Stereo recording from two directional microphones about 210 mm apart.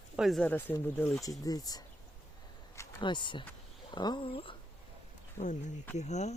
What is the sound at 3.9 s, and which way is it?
Speech, 20° left (ahead or behind).